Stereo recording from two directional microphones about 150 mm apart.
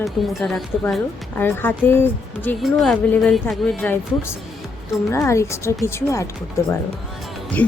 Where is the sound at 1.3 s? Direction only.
15° left (ahead or behind).